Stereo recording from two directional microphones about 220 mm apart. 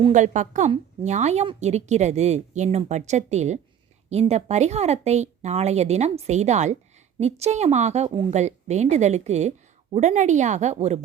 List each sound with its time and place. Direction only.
0.0 s a woman's voice: 35° right (ahead or behind)